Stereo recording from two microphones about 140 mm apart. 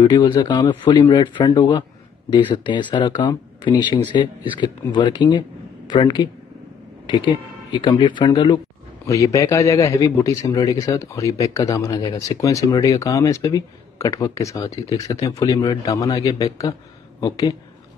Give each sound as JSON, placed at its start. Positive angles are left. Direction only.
{"t": 0.0, "sound": "speech", "side_deg": 30}
{"t": 9.0, "sound": "a man's voice", "side_deg": 20}